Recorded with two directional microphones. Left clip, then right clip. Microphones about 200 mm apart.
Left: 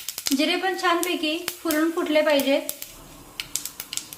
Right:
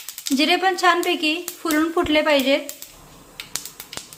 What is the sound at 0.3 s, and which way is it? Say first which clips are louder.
A woman's voice: right 6 dB; 55° right (ahead or behind).